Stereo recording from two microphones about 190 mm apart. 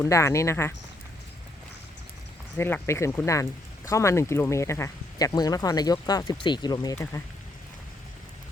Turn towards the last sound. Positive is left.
turn(degrees=15)  # may be behind; listen again after turning